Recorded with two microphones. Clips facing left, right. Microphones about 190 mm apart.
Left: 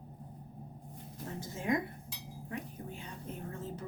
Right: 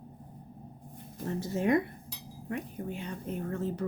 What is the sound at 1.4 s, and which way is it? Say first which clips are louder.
Speech: right 6 dB; 65° right (ahead or behind).